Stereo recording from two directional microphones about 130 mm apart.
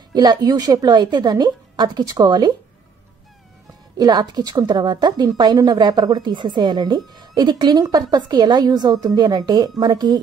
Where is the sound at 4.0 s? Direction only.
30° right (ahead or behind).